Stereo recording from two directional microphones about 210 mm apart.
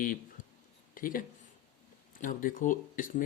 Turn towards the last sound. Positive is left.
turn(degrees=40)  # may be behind; listen again after turning